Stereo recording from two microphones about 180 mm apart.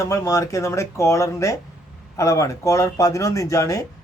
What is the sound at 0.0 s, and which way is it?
Speech, 15° left (ahead or behind).